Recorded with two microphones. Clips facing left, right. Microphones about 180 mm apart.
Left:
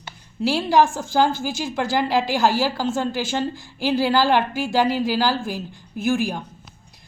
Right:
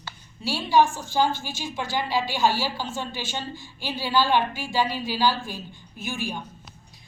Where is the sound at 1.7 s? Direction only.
90° left.